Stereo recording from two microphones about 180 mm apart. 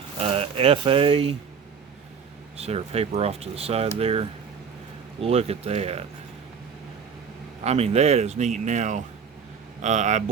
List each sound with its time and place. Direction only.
0.2 s speech: 35° right (ahead or behind)
2.6 s speech: 35° right (ahead or behind)
7.6 s speech: 35° right (ahead or behind)